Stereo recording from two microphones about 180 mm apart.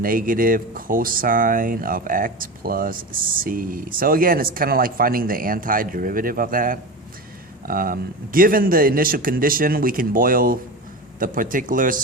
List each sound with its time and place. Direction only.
0.0 s speech: 50° right (ahead or behind)